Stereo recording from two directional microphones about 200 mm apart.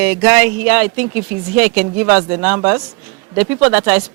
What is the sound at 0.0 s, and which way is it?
Speech, 10° right (ahead or behind).